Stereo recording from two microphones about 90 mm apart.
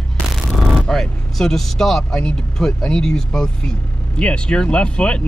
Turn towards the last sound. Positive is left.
turn(degrees=10)  # may be behind; listen again after turning